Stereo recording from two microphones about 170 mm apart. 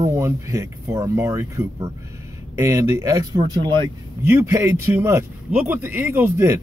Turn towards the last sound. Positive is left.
turn(degrees=-15)  # may be behind; listen again after turning